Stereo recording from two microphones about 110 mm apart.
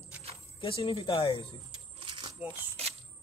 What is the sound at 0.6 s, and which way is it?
Speech, 50° left (ahead or behind).